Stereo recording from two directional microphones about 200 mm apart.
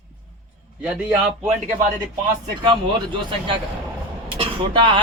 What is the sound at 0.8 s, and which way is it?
Speech, 5° right (ahead or behind).